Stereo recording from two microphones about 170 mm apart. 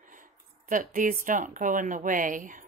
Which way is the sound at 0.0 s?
50° right (ahead or behind).